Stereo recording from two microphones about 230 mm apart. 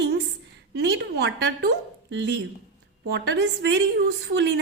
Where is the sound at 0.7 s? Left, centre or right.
Right.